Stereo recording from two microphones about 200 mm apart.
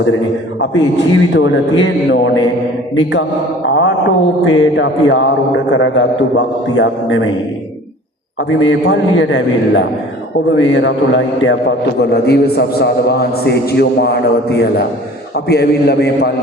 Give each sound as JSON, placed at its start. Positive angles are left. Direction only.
{"t": 0.6, "sound": "a man's voice", "side_deg": 65}
{"t": 3.7, "sound": "mantra", "side_deg": 65}
{"t": 4.4, "sound": "a man's voice", "side_deg": 70}
{"t": 8.4, "sound": "a man's voice", "side_deg": 70}
{"t": 11.9, "sound": "a man's voice", "side_deg": 55}